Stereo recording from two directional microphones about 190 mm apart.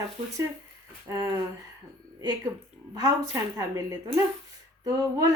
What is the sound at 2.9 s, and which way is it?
A woman's voice, 20° right (ahead or behind).